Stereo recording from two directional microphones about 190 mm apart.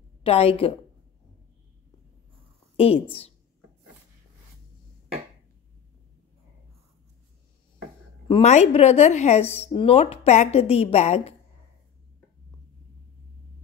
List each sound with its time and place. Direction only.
0.2 s a woman's voice: 30° left (ahead or behind)
2.8 s a woman's voice: 30° left (ahead or behind)
8.3 s a woman's voice: 35° left (ahead or behind)